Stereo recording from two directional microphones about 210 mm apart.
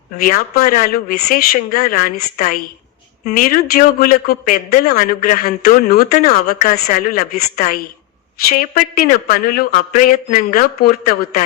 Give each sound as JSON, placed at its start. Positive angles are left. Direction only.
{"t": 0.2, "sound": "a man's voice", "side_deg": 45}